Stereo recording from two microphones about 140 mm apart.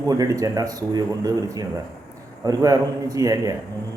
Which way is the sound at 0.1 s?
25° right (ahead or behind).